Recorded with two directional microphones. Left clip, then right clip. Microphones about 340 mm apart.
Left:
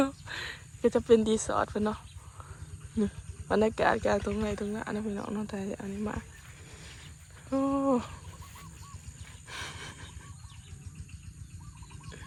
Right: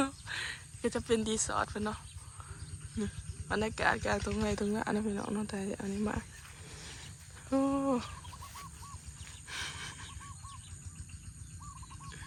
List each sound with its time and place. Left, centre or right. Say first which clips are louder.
0.0 s speech: left 4 dB; centre
3.5 s speech: left 5 dB; centre
6.7 s wild animals: right 2 dB; centre
7.5 s a sound: left 3 dB; centre